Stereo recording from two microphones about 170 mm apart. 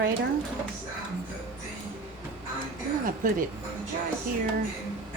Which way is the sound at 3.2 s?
50° right (ahead or behind).